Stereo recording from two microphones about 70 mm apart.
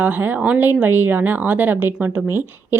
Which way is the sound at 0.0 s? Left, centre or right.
Right.